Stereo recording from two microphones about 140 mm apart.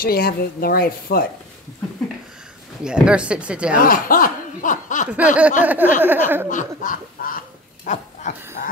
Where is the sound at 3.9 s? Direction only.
85° left; by 5.1 s 70° left (ahead or behind).